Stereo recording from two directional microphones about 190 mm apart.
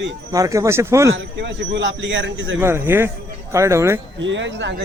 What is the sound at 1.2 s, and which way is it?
A man's voice, 70° right (ahead or behind).